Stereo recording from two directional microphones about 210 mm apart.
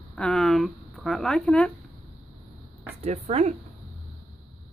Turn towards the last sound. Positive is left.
turn(degrees=-30)  # may be behind; listen again after turning